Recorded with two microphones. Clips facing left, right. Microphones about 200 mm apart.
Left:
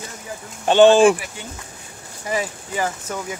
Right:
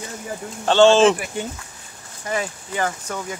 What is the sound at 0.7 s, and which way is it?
Speech, 15° left (ahead or behind).